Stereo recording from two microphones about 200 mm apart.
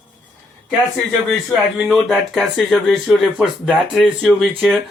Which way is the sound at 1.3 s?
Centre (ahead or behind).